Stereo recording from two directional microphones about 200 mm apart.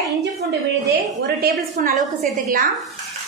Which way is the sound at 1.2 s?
50° right (ahead or behind).